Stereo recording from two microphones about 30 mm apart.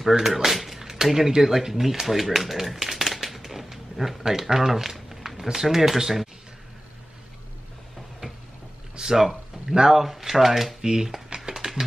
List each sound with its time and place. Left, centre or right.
0.2 s speech: centre
2.0 s a sound: centre
4.3 s speech: centre
4.9 s a sound: centre
5.5 s speech: centre
9.0 s speech: centre
10.8 s speech: centre
11.2 s a sound: right
11.5 s music: centre